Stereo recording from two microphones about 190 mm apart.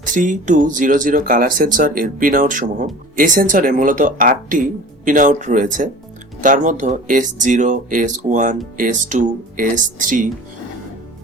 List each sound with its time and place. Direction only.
0.0 s speech: 40° right (ahead or behind)